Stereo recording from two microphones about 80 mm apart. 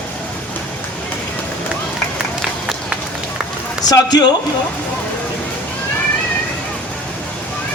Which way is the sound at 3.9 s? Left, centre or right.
Left.